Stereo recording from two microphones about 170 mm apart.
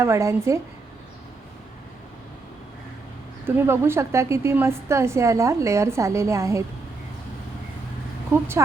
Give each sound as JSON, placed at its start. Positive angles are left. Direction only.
{"t": 0.0, "sound": "a woman's voice", "side_deg": -15}
{"t": 3.4, "sound": "a woman's voice", "side_deg": -15}
{"t": 8.3, "sound": "a woman's voice", "side_deg": -15}